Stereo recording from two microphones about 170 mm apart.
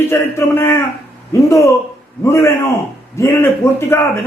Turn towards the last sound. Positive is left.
turn(degrees=15)  # may be behind; listen again after turning